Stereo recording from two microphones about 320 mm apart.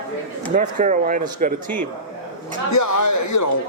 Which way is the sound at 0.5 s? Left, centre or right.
Right.